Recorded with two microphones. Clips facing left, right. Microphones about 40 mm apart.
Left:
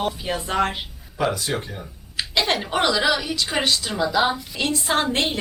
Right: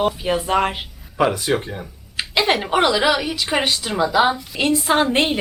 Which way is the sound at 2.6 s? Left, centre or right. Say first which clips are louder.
Right 4 dB; centre.